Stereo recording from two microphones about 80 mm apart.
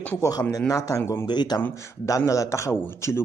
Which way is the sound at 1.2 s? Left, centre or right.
Left.